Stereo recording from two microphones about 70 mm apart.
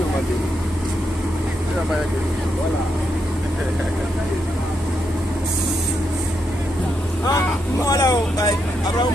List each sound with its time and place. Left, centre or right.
7.3 s speech: left